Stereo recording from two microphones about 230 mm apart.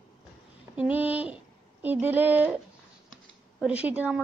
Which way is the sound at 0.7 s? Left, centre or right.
Centre.